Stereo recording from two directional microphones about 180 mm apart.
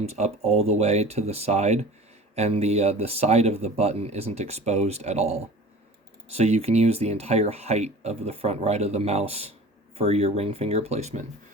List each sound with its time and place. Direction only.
0.0 s speech: 35° right (ahead or behind)